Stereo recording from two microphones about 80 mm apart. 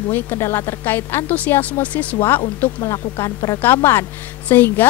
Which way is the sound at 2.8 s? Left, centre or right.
Left.